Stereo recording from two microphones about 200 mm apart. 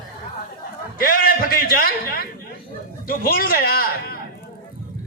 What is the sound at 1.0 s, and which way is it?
A man's voice, 50° left (ahead or behind).